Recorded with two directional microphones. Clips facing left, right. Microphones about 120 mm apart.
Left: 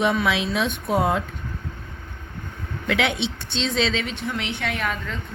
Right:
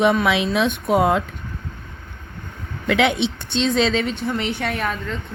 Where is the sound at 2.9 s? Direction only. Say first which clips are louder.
Right 5 dB; 55° right (ahead or behind); by 4.7 s 40° right (ahead or behind).